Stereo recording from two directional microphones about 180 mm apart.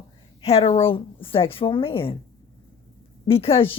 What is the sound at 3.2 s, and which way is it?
Speech, 30° left (ahead or behind).